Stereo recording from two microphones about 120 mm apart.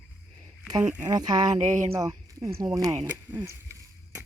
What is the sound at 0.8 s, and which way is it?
Speech, 15° right (ahead or behind).